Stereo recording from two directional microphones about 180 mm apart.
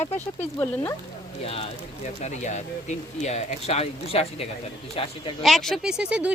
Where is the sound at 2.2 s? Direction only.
40° left (ahead or behind).